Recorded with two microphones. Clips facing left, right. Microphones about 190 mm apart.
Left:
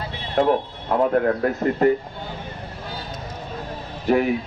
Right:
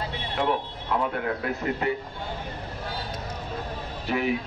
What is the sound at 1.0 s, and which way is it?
Speech, 45° left (ahead or behind).